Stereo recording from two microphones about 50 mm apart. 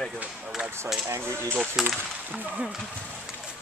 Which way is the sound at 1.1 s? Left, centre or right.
Right.